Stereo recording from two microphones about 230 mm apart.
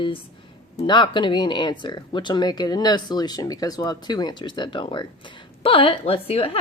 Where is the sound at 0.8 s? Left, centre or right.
Centre.